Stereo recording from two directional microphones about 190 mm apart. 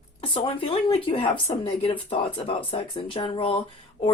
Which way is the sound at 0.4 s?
30° left (ahead or behind).